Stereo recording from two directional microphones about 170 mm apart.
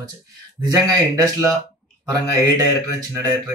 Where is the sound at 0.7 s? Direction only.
20° right (ahead or behind).